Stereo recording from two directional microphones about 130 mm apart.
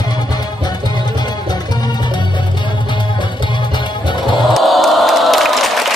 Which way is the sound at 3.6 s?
35° left (ahead or behind).